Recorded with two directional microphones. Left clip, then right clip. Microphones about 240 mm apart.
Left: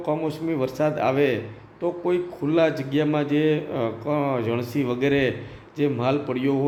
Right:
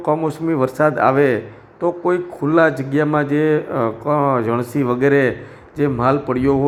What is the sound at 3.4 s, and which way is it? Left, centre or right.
Speech, right.